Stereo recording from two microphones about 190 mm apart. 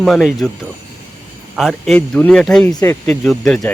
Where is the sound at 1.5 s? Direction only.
Centre (ahead or behind).